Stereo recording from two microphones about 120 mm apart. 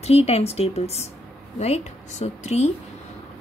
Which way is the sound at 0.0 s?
60° left (ahead or behind).